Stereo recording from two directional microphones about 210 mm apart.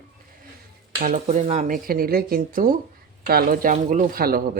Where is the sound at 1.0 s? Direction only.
35° right (ahead or behind).